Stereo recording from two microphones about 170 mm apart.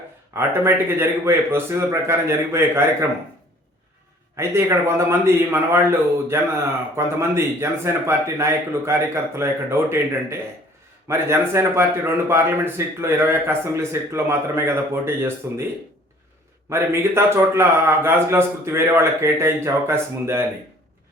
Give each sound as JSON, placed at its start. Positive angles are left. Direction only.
{"t": 0.3, "sound": "a man's voice", "side_deg": -15}
{"t": 4.4, "sound": "a man's voice", "side_deg": -15}
{"t": 16.6, "sound": "a man's voice", "side_deg": -15}